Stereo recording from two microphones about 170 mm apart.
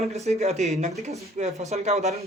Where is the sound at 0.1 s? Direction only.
40° right (ahead or behind).